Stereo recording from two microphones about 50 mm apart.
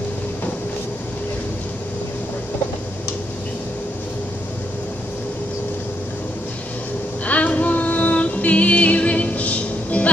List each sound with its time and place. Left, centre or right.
7.2 s music: left